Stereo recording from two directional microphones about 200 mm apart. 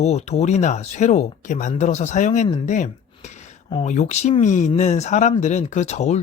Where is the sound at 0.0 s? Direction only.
30° left (ahead or behind).